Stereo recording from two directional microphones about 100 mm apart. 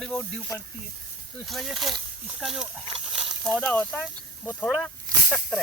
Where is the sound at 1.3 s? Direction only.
Centre (ahead or behind).